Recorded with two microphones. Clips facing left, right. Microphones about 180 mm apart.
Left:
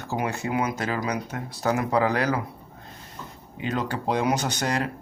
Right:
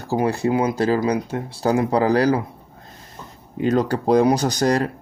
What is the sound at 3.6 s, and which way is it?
Speech, 40° right (ahead or behind).